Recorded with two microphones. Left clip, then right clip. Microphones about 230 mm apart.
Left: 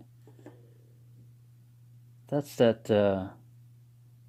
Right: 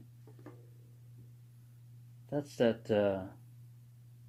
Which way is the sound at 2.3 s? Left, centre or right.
Left.